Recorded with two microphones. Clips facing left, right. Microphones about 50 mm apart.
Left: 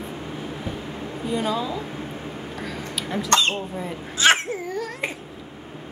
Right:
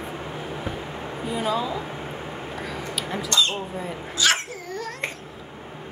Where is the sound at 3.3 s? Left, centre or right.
Left.